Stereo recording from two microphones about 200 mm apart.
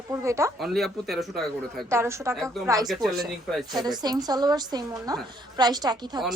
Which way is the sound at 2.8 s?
Centre (ahead or behind).